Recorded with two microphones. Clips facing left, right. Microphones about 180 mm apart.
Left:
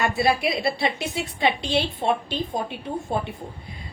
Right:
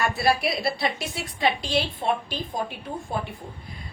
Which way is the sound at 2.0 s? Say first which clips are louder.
Left 3 dB; 25° left (ahead or behind).